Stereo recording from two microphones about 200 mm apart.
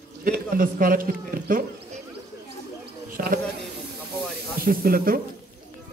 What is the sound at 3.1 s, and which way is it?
Speech, 45° right (ahead or behind).